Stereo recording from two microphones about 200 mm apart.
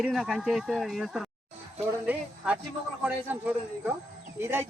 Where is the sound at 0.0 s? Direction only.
Centre (ahead or behind).